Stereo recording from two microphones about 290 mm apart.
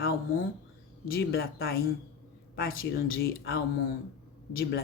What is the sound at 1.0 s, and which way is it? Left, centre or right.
Speech, left.